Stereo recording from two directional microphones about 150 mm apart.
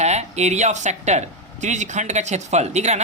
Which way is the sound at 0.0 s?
50° right (ahead or behind).